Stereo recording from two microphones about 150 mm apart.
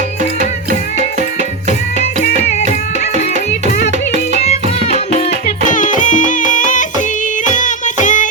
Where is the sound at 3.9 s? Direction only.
50° right (ahead or behind).